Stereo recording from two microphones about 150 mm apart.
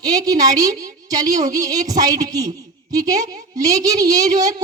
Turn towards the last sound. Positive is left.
turn(degrees=-25)  # may be behind; listen again after turning